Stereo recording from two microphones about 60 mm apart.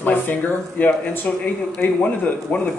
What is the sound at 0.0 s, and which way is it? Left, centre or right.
Speech, left.